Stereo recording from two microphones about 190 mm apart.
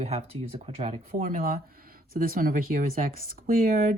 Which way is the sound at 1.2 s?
45° right (ahead or behind).